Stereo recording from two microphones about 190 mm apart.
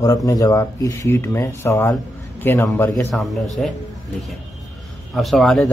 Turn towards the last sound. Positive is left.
turn(degrees=0)  # may be behind; listen again after turning